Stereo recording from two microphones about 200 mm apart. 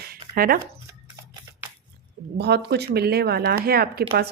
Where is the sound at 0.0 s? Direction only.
45° right (ahead or behind).